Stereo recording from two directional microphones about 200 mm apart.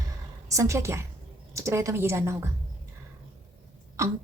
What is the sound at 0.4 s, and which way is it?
A woman's voice, 15° right (ahead or behind).